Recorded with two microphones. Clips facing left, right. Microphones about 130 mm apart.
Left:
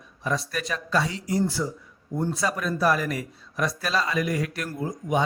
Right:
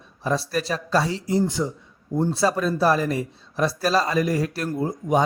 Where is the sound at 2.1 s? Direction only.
30° right (ahead or behind).